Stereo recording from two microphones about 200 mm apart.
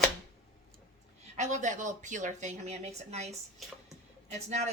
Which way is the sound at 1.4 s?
40° right (ahead or behind).